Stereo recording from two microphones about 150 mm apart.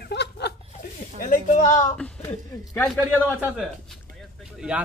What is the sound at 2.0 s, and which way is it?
Speech, 10° left (ahead or behind).